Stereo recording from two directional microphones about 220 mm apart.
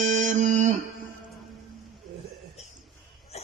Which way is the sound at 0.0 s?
35° right (ahead or behind).